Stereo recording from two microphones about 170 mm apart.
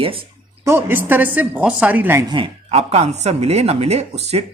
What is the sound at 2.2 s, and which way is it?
Speech, 30° right (ahead or behind).